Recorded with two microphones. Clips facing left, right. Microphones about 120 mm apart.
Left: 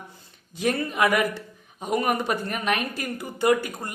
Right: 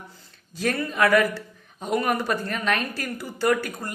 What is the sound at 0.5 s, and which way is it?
A woman's voice, 20° left (ahead or behind).